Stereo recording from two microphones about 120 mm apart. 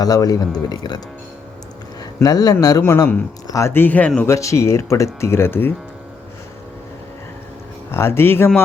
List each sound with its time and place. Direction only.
0.0 s speech: 30° left (ahead or behind)
2.2 s speech: 35° left (ahead or behind); by 4.3 s 10° left (ahead or behind)
4.3 s speech: 25° left (ahead or behind)
7.9 s speech: 20° left (ahead or behind)